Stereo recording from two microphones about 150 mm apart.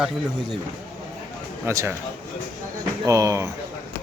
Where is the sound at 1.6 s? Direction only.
15° right (ahead or behind).